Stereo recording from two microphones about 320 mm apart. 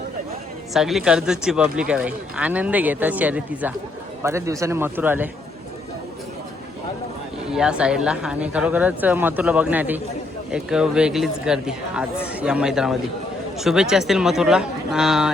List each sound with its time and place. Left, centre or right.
0.7 s a man's voice: centre
7.5 s speech: centre